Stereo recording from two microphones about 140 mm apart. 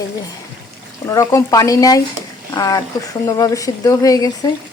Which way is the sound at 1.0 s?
25° left (ahead or behind).